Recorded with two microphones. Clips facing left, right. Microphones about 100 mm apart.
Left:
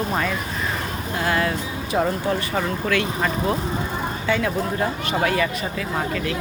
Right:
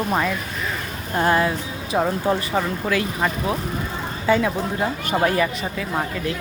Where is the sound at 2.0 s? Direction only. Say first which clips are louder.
Right 1 dB; 10° right (ahead or behind).